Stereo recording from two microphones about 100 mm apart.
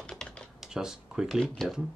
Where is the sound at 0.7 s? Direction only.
5° right (ahead or behind).